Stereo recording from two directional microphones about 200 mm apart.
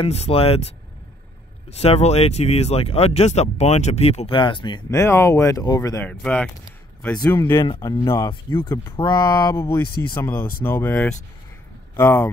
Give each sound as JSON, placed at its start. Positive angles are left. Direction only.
{"t": 0.0, "sound": "speech", "side_deg": 30}
{"t": 1.7, "sound": "speech", "side_deg": 30}
{"t": 7.6, "sound": "speech", "side_deg": 25}